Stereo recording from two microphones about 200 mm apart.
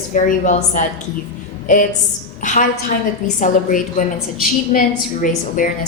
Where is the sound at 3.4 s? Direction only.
40° left (ahead or behind).